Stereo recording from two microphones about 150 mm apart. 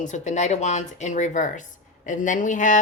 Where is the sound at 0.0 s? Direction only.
55° left (ahead or behind).